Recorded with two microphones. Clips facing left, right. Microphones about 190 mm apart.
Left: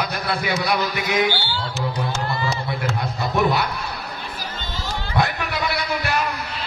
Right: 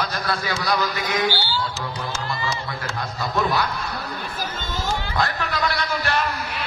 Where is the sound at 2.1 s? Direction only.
60° left (ahead or behind).